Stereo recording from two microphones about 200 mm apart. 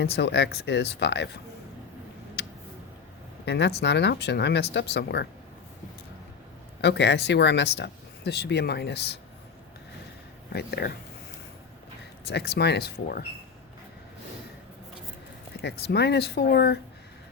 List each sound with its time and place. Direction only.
0.0 s speech: 55° left (ahead or behind)
3.4 s speech: 60° left (ahead or behind)
6.8 s speech: 60° left (ahead or behind)
10.5 s speech: 55° left (ahead or behind)
12.2 s speech: 55° left (ahead or behind)
15.6 s speech: 55° left (ahead or behind)